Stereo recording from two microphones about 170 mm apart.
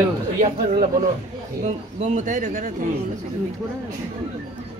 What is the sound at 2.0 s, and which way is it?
Speech, 45° right (ahead or behind).